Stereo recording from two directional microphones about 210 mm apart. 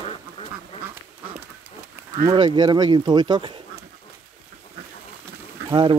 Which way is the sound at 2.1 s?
35° right (ahead or behind).